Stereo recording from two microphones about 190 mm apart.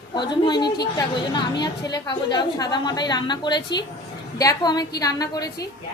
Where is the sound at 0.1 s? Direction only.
25° left (ahead or behind).